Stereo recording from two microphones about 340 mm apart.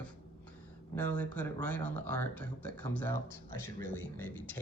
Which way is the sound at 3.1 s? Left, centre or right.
Right.